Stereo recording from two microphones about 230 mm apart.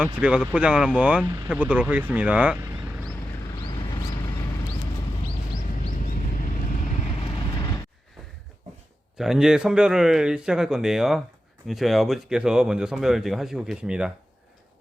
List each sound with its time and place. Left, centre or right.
0.2 s speech: centre
3.7 s a sound: centre
6.0 s vehicle: left
7.2 s vehicle: centre
9.1 s speech: centre